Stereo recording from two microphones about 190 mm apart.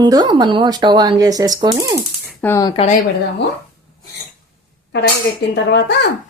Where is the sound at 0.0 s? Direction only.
20° right (ahead or behind).